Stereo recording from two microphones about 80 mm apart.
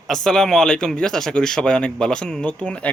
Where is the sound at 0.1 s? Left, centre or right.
Centre.